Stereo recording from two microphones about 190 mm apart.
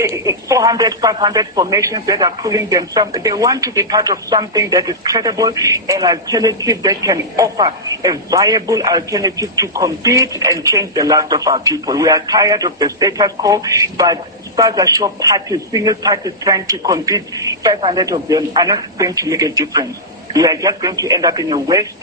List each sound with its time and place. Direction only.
0.0 s speech: 15° right (ahead or behind)